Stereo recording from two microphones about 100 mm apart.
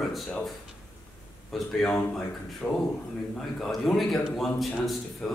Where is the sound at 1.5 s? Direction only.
5° left (ahead or behind).